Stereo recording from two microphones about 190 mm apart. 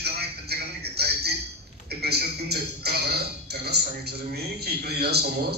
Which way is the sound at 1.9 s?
55° right (ahead or behind).